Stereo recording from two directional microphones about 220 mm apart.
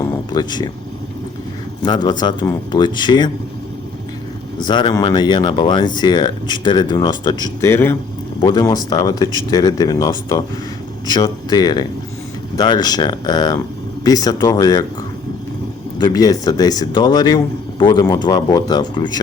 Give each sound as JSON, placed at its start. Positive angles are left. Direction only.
{"t": 0.0, "sound": "a sound", "side_deg": 20}
{"t": 1.8, "sound": "speech", "side_deg": 20}
{"t": 4.6, "sound": "speech", "side_deg": 20}
{"t": 16.0, "sound": "speech", "side_deg": 20}